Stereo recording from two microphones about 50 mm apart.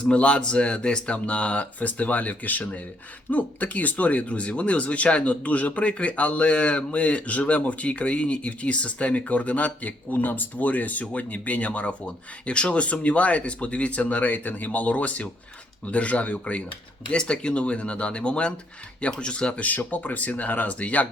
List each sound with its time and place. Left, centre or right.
0.0 s speech: left